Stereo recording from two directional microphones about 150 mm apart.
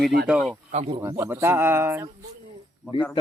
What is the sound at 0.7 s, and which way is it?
Speech, 50° right (ahead or behind).